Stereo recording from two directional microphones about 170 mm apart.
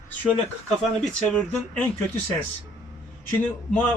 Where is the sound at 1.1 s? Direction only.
5° left (ahead or behind).